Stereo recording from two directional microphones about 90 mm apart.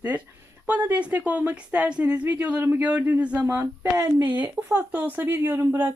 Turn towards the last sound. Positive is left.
turn(degrees=-25)  # may be behind; listen again after turning